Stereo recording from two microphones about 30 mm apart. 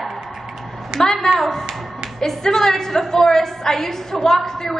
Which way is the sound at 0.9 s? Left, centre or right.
Right.